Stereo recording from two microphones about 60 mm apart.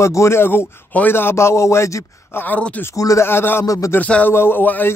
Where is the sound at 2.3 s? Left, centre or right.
Left.